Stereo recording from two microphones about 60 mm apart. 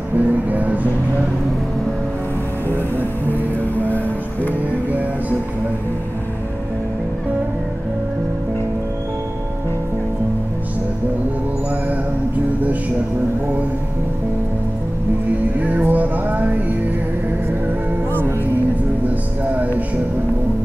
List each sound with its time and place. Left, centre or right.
0.2 s music: right
15.6 s music: right
19.0 s music: right